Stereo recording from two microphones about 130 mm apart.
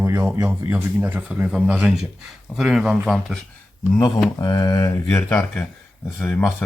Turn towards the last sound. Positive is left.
turn(degrees=15)  # may be behind; listen again after turning